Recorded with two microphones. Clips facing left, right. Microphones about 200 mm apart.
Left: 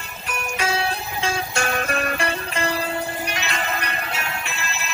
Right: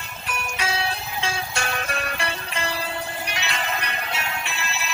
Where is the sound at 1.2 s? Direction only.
45° left (ahead or behind).